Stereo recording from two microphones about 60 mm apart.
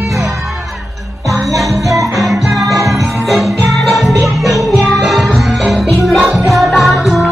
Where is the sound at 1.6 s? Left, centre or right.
Centre.